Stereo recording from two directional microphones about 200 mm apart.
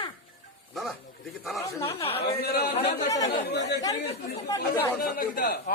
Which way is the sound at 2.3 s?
50° left (ahead or behind).